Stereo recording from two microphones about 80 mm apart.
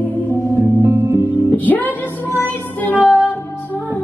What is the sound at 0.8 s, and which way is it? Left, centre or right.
Music, right.